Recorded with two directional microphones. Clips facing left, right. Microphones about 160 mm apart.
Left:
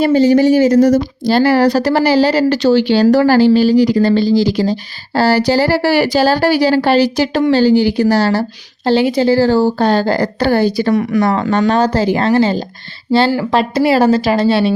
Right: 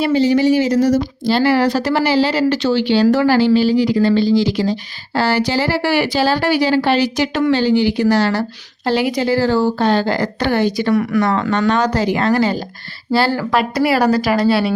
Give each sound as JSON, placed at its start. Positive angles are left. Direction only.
{"t": 0.0, "sound": "speech", "side_deg": 45}
{"t": 10.9, "sound": "speech", "side_deg": 20}
{"t": 11.2, "sound": "speech", "side_deg": 35}